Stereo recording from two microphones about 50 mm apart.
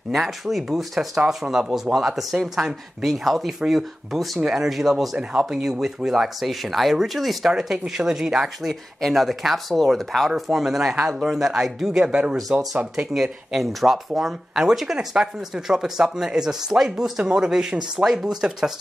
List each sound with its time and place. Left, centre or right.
0.1 s speech: centre
5.3 s speech: right
5.6 s speech: centre
10.5 s speech: centre
12.1 s speech: right
12.9 s speech: centre